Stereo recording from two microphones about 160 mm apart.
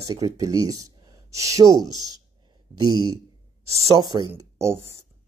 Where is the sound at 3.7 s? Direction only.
40° right (ahead or behind).